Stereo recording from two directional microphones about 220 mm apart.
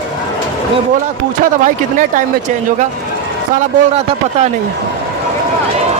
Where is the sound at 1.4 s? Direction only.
35° right (ahead or behind).